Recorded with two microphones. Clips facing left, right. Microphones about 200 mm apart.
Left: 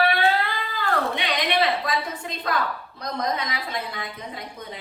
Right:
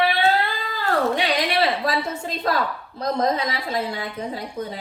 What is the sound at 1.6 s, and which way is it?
A woman's voice, 30° right (ahead or behind).